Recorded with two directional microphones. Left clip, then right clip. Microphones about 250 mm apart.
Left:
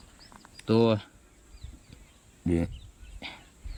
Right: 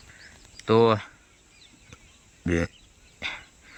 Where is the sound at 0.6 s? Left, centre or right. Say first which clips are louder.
Right 5 dB; centre.